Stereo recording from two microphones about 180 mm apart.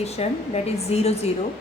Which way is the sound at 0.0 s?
35° left (ahead or behind).